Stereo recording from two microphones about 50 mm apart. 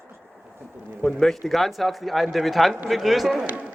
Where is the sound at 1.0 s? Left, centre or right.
Centre.